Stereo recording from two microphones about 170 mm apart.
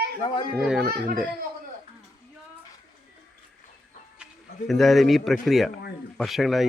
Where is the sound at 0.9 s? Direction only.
60° right (ahead or behind).